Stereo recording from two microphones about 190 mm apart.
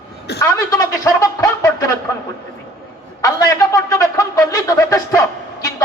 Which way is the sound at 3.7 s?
15° left (ahead or behind).